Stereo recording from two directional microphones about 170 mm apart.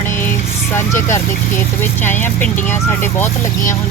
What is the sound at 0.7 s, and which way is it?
Speech, 15° left (ahead or behind).